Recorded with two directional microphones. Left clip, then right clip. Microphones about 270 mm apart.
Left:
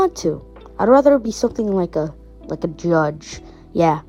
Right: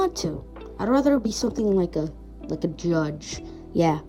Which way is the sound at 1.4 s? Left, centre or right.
Left.